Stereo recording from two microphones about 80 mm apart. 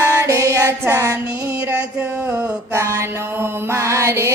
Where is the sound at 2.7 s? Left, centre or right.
Right.